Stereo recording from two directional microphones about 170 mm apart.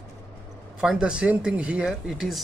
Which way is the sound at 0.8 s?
5° right (ahead or behind).